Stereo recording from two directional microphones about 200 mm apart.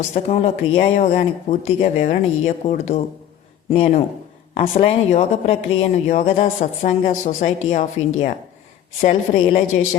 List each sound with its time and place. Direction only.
0.1 s a woman's voice: 30° left (ahead or behind)